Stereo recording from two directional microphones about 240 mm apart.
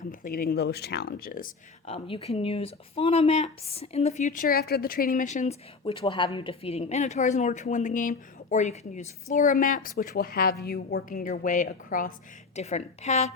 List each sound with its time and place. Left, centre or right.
0.1 s speech: left
2.0 s speech: left